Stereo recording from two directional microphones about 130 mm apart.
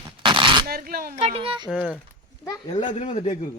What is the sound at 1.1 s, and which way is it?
Speech, 50° right (ahead or behind).